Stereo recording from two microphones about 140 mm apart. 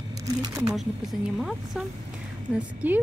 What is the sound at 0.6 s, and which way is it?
Speech, centre (ahead or behind).